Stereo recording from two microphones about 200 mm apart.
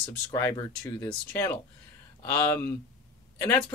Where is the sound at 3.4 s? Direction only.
15° left (ahead or behind).